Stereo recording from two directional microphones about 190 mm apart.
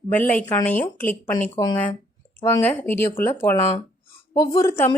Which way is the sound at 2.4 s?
10° left (ahead or behind).